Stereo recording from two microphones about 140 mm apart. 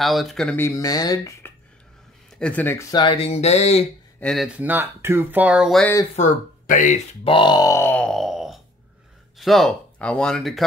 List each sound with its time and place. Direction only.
0.0 s speech: centre (ahead or behind)
0.6 s speech: 20° left (ahead or behind)
2.3 s speech: 10° left (ahead or behind)
2.9 s speech: 35° left (ahead or behind); by 3.8 s 50° left (ahead or behind)
4.2 s speech: centre (ahead or behind)
4.6 s speech: 15° right (ahead or behind)
6.1 s speech: 60° left (ahead or behind)
7.2 s speech: 35° left (ahead or behind); by 8.0 s 20° left (ahead or behind)
8.0 s groan: centre (ahead or behind)
9.4 s speech: centre (ahead or behind)